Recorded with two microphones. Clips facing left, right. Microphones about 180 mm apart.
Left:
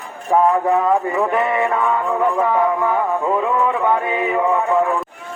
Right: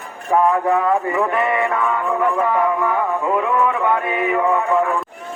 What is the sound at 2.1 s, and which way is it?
Music, 20° left (ahead or behind).